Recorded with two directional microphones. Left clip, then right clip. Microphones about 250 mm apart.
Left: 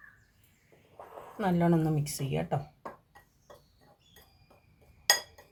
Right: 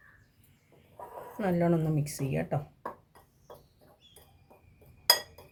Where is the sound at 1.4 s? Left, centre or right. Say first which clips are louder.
Even; left.